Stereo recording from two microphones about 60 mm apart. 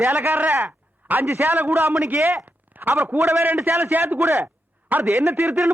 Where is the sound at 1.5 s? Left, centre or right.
Right.